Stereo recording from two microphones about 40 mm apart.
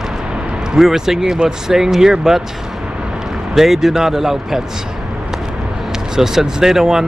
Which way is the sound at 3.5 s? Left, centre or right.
Centre.